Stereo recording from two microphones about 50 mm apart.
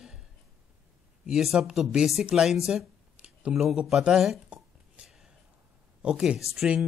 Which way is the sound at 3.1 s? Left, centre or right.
Right.